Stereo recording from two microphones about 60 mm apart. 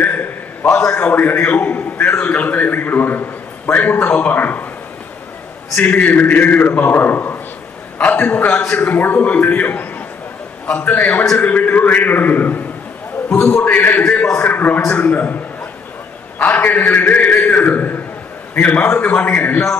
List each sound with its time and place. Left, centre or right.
0.0 s a sound: left
0.7 s a man's voice: left
5.8 s a man's voice: left
13.3 s a man's voice: left
16.3 s a man's voice: left